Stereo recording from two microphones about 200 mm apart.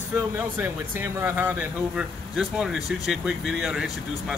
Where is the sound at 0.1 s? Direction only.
10° right (ahead or behind).